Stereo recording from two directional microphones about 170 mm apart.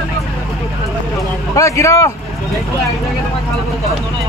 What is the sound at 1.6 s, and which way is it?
Speech, 20° left (ahead or behind).